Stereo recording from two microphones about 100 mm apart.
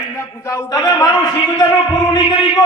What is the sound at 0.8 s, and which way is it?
Speech, 40° left (ahead or behind).